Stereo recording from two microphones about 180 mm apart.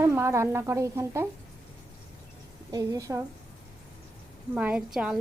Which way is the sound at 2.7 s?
20° right (ahead or behind).